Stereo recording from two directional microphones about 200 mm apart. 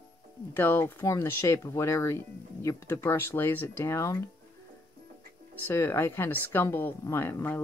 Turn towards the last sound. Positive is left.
turn(degrees=10)  # may be behind; listen again after turning